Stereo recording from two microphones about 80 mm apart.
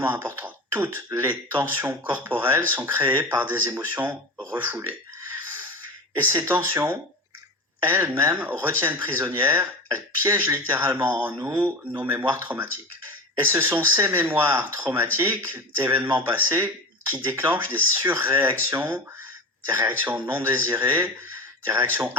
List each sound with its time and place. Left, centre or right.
0.0 s speech: right
6.1 s speech: right